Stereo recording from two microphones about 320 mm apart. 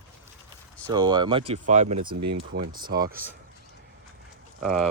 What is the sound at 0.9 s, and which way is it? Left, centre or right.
Speech, centre.